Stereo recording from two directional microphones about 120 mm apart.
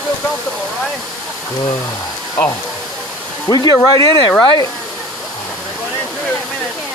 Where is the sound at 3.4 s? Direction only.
35° left (ahead or behind).